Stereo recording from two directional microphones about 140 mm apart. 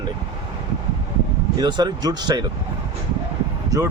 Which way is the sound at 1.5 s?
30° right (ahead or behind).